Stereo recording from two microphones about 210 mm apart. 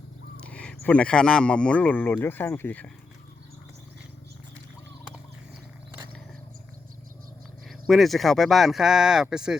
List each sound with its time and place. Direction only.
0.3 s speech: 5° left (ahead or behind)
7.7 s speech: centre (ahead or behind)